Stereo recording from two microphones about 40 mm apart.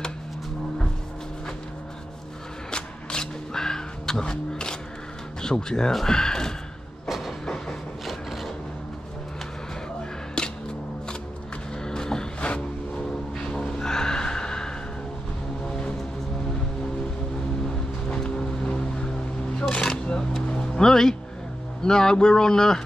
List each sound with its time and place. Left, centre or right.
2.7 s vehicle: left
5.4 s speech: centre
7.1 s train: centre
7.4 s vehicle: centre
8.1 s vehicle: centre
10.4 s a sound: centre
11.8 s vehicle: centre
12.4 s music: left
13.5 s a sound: centre
15.6 s music: left
18.0 s a sound: left
20.4 s music: left
21.8 s speech: centre